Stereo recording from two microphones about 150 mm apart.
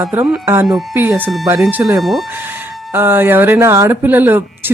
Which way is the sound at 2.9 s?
15° right (ahead or behind).